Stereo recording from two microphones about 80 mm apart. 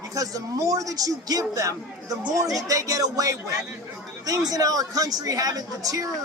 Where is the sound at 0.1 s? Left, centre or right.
Right.